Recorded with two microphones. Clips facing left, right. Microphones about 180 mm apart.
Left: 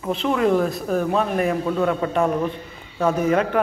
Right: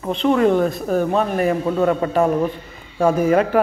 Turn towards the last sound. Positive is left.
turn(degrees=-10)  # may be behind; listen again after turning